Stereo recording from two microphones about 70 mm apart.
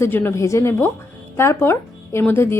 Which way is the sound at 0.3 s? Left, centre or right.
Left.